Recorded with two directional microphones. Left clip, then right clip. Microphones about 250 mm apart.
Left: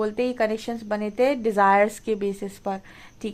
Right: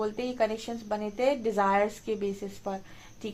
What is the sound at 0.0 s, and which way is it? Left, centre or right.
A woman's voice, left.